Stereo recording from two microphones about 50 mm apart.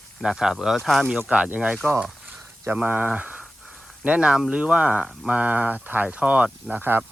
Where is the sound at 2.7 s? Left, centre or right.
Right.